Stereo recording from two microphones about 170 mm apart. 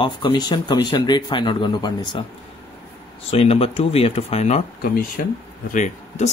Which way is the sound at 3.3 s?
35° left (ahead or behind).